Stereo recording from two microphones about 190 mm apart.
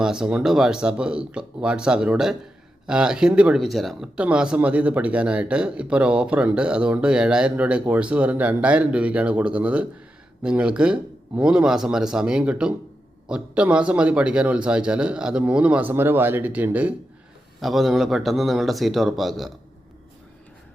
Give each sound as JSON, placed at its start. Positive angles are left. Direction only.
{"t": 0.0, "sound": "speech", "side_deg": -5}